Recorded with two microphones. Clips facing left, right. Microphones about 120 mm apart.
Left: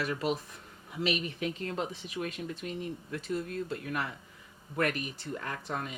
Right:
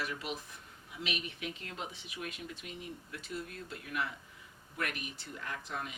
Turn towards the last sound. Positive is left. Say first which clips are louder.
# left 5 dB
turn(degrees=45)  # may be behind; listen again after turning